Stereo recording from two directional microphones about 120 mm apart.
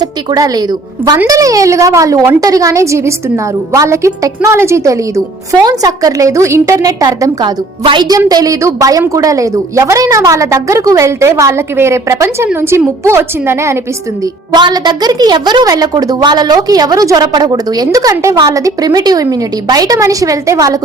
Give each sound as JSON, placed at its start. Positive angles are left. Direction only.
{"t": 0.0, "sound": "a woman's voice", "side_deg": -30}
{"t": 14.5, "sound": "a woman's voice", "side_deg": -35}